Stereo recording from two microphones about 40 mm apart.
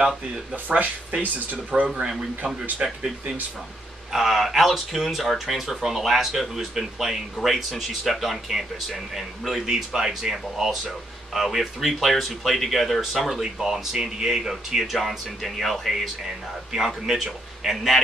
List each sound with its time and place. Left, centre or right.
0.7 s speech: right
4.1 s speech: centre